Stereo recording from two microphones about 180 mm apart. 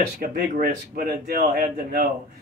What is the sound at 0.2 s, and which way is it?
Speech, 55° right (ahead or behind).